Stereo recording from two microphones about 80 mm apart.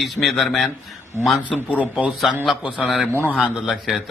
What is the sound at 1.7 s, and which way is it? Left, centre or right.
Speech, centre.